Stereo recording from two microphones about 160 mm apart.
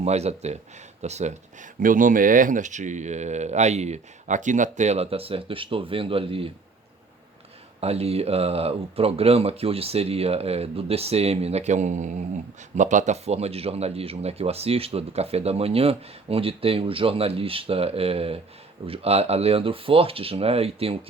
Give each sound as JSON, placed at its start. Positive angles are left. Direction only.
{"t": 0.0, "sound": "speech", "side_deg": -40}
{"t": 7.8, "sound": "speech", "side_deg": -40}